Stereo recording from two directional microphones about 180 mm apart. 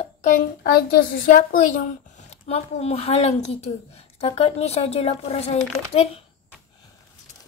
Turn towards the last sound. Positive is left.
turn(degrees=35)  # may be behind; listen again after turning